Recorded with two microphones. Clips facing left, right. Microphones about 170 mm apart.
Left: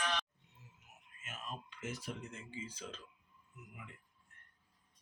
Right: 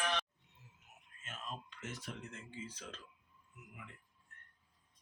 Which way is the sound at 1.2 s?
5° left (ahead or behind).